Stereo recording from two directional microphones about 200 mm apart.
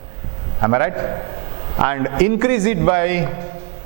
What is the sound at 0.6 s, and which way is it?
A man's voice, 20° right (ahead or behind).